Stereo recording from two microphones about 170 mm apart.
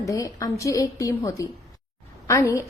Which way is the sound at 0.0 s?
20° left (ahead or behind).